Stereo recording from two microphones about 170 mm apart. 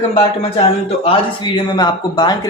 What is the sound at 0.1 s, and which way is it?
A man's voice, 35° left (ahead or behind).